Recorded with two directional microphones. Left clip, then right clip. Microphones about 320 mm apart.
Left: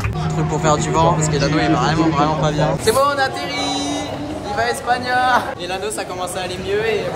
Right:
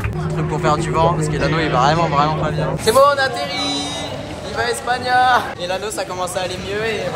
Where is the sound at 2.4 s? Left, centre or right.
Left.